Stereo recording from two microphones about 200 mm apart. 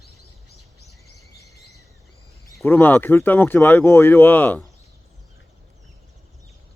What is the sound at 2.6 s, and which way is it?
Speech, 10° left (ahead or behind).